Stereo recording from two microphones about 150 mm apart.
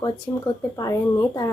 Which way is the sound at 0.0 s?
25° left (ahead or behind).